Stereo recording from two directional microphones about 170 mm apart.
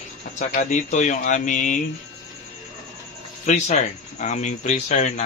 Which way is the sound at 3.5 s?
45° left (ahead or behind).